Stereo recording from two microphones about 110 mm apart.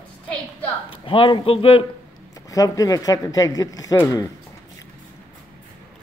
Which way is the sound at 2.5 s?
30° left (ahead or behind).